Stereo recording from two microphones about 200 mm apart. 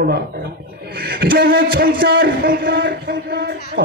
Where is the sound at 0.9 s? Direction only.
50° right (ahead or behind).